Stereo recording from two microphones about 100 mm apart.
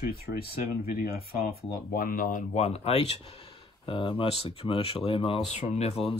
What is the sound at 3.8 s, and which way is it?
Speech, 55° left (ahead or behind).